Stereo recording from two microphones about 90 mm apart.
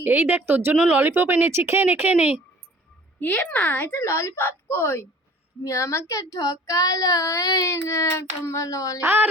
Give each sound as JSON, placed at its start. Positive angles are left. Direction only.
{"t": 0.0, "sound": "speech", "side_deg": -20}
{"t": 3.2, "sound": "a child's voice", "side_deg": 15}
{"t": 5.6, "sound": "child singing", "side_deg": 35}